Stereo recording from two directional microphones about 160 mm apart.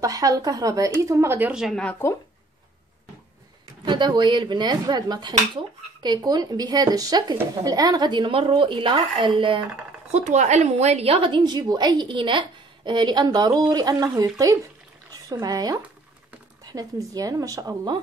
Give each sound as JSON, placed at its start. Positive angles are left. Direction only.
{"t": 0.0, "sound": "a woman's voice", "side_deg": -20}
{"t": 1.5, "sound": "speech", "side_deg": 0}
{"t": 3.8, "sound": "a woman's voice", "side_deg": -30}
{"t": 10.1, "sound": "a woman's voice", "side_deg": -45}
{"t": 15.4, "sound": "a woman's voice", "side_deg": -25}